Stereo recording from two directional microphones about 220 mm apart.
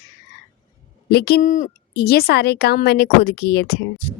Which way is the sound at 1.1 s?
45° left (ahead or behind).